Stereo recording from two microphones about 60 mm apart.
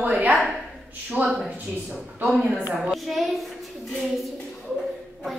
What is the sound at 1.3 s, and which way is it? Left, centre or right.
Speech, centre.